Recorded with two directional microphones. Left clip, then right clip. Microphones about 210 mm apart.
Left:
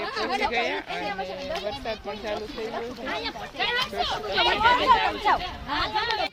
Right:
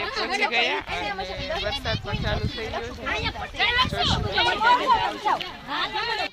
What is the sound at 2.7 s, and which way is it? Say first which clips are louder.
Speech: right 4 dB; 25° right (ahead or behind).